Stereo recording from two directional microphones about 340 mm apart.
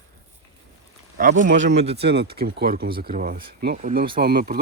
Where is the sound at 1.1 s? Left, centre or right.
Right.